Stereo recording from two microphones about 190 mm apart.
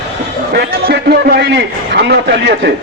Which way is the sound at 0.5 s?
55° right (ahead or behind).